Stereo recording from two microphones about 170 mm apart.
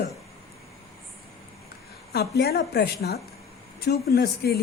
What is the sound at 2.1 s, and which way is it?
Speech, 70° left (ahead or behind).